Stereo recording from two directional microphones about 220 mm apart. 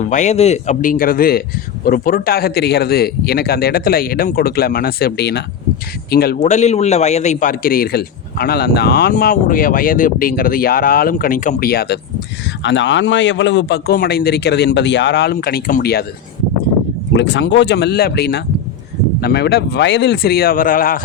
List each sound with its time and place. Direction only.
0.0 s a man's voice: 35° left (ahead or behind)
6.4 s a man's voice: 30° left (ahead or behind)
12.6 s speech: 55° left (ahead or behind)
17.2 s speech: 50° left (ahead or behind)